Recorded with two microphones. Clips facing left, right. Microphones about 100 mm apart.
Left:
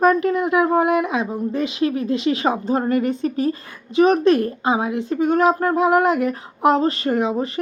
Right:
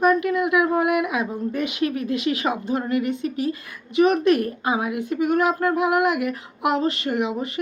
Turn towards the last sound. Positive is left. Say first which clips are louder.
# left 4 dB
turn(degrees=35)  # may be behind; listen again after turning